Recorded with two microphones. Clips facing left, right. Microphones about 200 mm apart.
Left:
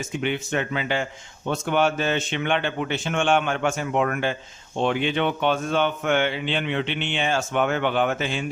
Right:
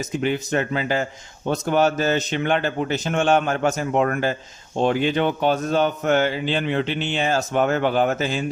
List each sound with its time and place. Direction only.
0.2 s a man's voice: 40° right (ahead or behind)